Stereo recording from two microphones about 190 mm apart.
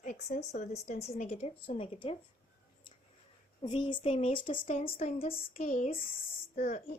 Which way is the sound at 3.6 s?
25° left (ahead or behind).